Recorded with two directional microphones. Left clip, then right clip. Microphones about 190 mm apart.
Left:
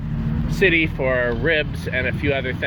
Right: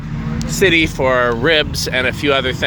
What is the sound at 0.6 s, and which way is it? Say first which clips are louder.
Speech: right 5 dB; 30° right (ahead or behind).